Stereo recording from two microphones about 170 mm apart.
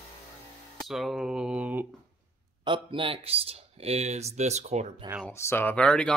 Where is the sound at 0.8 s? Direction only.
Centre (ahead or behind).